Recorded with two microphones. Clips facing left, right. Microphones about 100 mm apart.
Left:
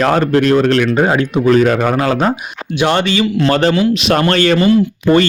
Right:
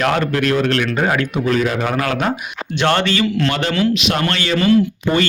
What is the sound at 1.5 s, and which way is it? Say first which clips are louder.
Speech: left 7 dB; 45° left (ahead or behind).